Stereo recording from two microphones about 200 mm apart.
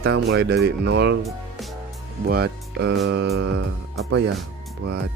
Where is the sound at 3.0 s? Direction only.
55° right (ahead or behind).